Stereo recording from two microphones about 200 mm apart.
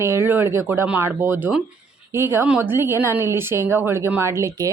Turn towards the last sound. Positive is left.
turn(degrees=-15)  # may be behind; listen again after turning